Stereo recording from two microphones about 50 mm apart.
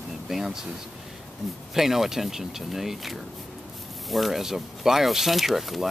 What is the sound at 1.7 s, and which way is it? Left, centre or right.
Speech, centre.